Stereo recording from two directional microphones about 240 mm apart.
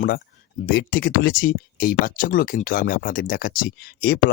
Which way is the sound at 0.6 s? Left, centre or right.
Left.